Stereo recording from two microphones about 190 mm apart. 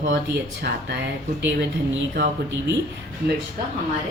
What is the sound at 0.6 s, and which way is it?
A woman's voice, 60° right (ahead or behind).